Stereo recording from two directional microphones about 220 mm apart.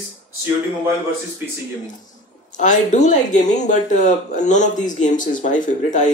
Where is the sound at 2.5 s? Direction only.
35° left (ahead or behind).